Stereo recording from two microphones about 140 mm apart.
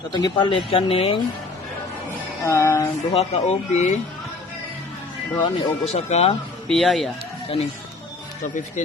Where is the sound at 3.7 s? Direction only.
55° left (ahead or behind).